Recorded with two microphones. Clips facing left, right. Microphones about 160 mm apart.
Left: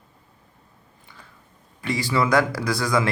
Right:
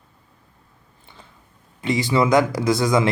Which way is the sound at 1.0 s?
25° right (ahead or behind).